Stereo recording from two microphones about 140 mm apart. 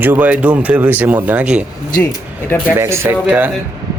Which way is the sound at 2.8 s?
20° right (ahead or behind).